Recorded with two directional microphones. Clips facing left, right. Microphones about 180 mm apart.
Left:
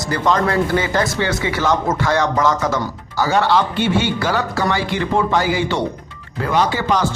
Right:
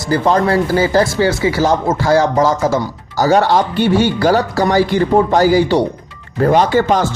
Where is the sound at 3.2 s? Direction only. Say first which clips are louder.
Right 4 dB; 40° right (ahead or behind).